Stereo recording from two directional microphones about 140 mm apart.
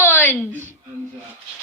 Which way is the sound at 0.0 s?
15° left (ahead or behind).